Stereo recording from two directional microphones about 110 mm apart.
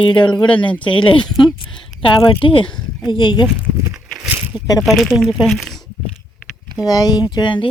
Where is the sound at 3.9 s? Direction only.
5° right (ahead or behind).